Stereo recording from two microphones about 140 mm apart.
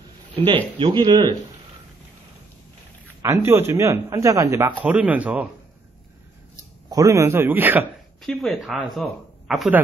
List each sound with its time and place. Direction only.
0.7 s speech: 35° right (ahead or behind)
3.2 s speech: 20° right (ahead or behind)
4.8 s a man's voice: 10° right (ahead or behind)
6.9 s a man's voice: 25° right (ahead or behind)
8.2 s speech: centre (ahead or behind)